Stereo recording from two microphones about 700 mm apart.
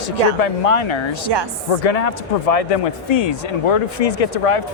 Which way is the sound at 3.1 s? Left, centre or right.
Left.